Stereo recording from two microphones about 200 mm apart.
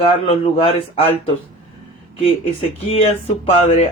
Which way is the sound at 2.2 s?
30° left (ahead or behind).